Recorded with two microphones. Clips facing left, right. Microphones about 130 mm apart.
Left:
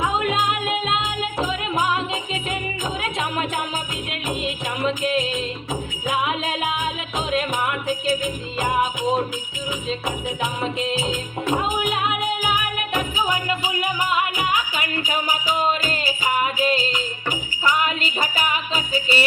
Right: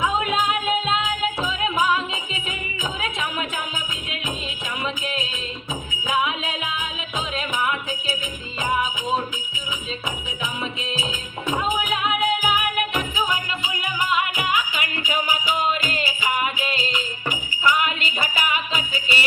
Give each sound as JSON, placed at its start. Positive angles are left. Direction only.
{"t": 7.3, "sound": "music", "side_deg": 50}
{"t": 14.3, "sound": "music", "side_deg": 40}